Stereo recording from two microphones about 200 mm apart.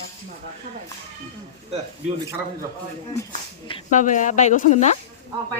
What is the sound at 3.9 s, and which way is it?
Speech, 40° left (ahead or behind).